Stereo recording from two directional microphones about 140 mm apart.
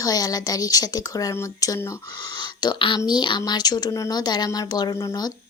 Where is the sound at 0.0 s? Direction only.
25° left (ahead or behind).